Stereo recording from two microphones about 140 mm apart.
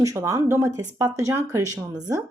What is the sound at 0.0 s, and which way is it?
Speech, 25° right (ahead or behind).